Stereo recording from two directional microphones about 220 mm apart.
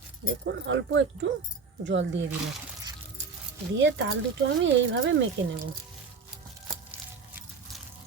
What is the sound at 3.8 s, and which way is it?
Speech, 55° right (ahead or behind).